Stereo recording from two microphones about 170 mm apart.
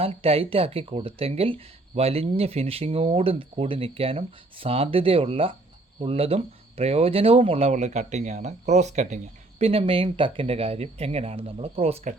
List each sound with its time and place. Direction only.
0.0 s speech: 35° right (ahead or behind)